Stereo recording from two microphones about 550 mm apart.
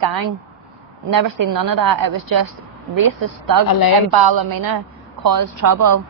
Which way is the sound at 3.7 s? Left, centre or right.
Left.